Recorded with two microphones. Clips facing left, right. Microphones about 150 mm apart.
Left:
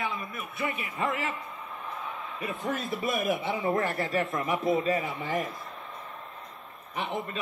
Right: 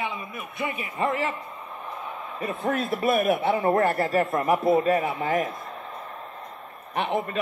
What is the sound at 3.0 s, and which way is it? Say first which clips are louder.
Speech: right 7 dB; 60° right (ahead or behind).